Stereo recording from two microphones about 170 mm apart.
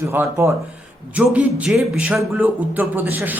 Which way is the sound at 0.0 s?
15° right (ahead or behind).